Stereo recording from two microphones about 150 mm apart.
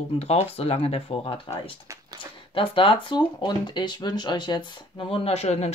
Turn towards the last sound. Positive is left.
turn(degrees=45)  # may be behind; listen again after turning